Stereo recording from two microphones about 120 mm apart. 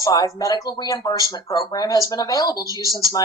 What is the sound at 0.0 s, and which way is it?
A woman's voice, 30° left (ahead or behind).